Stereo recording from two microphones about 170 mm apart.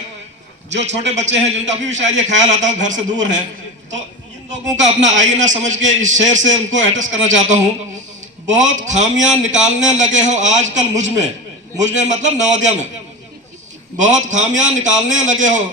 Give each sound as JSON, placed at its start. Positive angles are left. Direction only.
{"t": 0.8, "sound": "a man's voice", "side_deg": -40}
{"t": 4.5, "sound": "a man's voice", "side_deg": -45}
{"t": 13.9, "sound": "a man's voice", "side_deg": -45}